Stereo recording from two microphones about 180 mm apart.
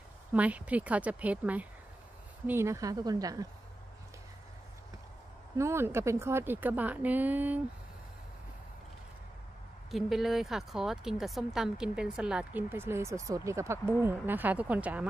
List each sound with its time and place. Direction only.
0.3 s a woman's voice: 10° right (ahead or behind)
5.6 s a woman's voice: 15° right (ahead or behind)
9.8 s a woman's voice: centre (ahead or behind)